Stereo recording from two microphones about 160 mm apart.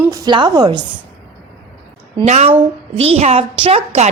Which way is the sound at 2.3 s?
45° right (ahead or behind).